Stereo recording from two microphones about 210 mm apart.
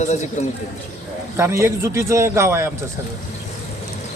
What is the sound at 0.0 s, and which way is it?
Speech, 35° left (ahead or behind).